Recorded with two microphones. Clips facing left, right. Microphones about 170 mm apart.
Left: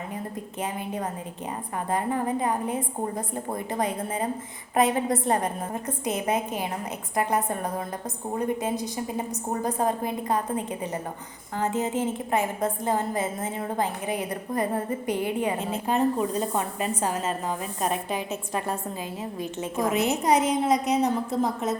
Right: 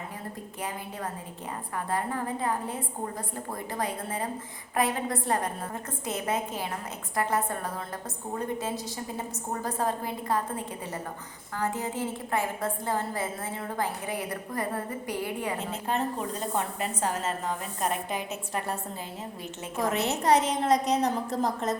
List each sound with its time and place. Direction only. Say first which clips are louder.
1.9 s a woman's voice: left 5 dB; 20° left (ahead or behind)